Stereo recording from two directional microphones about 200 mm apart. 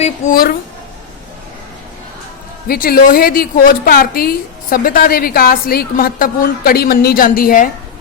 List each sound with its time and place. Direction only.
0.0 s a woman's voice: 45° left (ahead or behind)
2.6 s a woman's voice: 45° left (ahead or behind)